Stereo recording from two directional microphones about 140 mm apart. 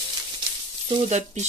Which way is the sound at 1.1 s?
55° right (ahead or behind).